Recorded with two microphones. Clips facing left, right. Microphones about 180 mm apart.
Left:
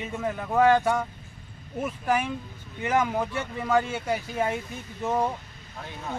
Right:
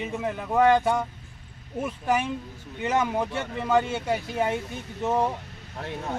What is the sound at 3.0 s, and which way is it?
Speech, centre (ahead or behind).